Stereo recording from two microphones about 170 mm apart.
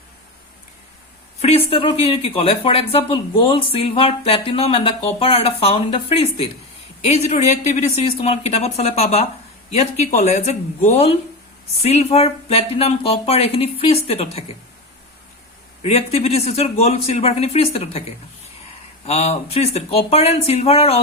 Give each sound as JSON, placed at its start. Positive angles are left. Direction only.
{"t": 1.4, "sound": "speech", "side_deg": 35}
{"t": 15.8, "sound": "speech", "side_deg": 40}
{"t": 19.0, "sound": "speech", "side_deg": 40}